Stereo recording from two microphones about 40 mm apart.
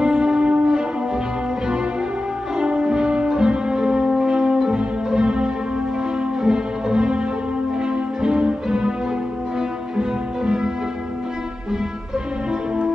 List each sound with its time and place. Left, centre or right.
0.0 s music: centre
2.6 s music: right
9.9 s music: centre